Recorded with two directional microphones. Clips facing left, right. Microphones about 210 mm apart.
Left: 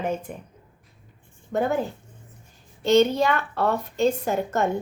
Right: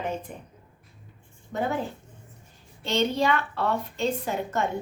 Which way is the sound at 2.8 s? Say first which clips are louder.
Left 6 dB; 45° left (ahead or behind).